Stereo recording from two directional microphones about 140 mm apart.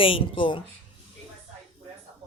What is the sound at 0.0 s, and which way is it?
Speech, 40° left (ahead or behind).